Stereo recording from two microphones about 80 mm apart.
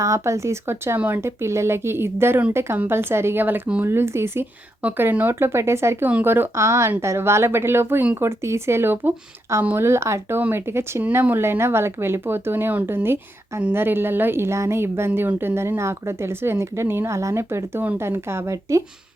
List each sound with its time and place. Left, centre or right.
0.0 s speech: right
0.9 s speech: right
1.2 s speech: right
4.8 s speech: centre; by 18.8 s right